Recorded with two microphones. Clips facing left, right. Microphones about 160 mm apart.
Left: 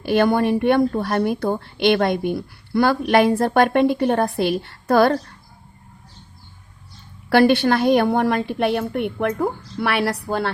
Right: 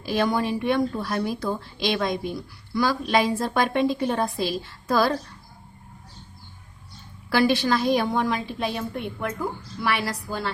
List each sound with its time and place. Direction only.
0.0 s a woman's voice: 60° left (ahead or behind)
7.3 s a woman's voice: 60° left (ahead or behind)